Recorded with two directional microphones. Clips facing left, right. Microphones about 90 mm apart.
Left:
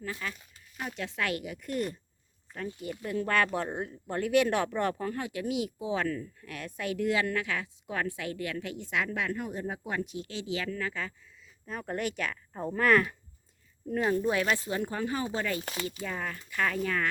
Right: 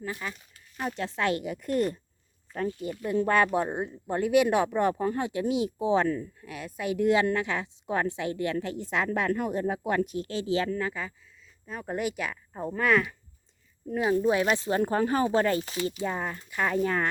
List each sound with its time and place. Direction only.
0.0 s speech: 20° right (ahead or behind)
0.8 s speech: 35° right (ahead or behind)
3.0 s speech: 25° right (ahead or behind); by 9.4 s 40° right (ahead or behind)
9.4 s speech: 65° right (ahead or behind); by 10.8 s 35° right (ahead or behind)
10.8 s speech: 20° right (ahead or behind)
11.6 s speech: centre (ahead or behind)
14.3 s speech: 20° right (ahead or behind)
14.7 s speech: 45° right (ahead or behind)
15.6 s speech: 50° left (ahead or behind)
16.0 s speech: 25° right (ahead or behind)